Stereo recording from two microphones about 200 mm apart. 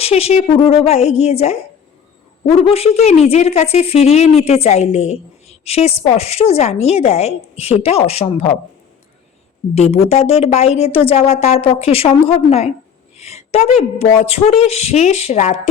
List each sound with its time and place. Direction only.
0.0 s a woman's voice: 30° left (ahead or behind)
2.6 s a woman's voice: 30° left (ahead or behind)
9.7 s a woman's voice: 35° left (ahead or behind)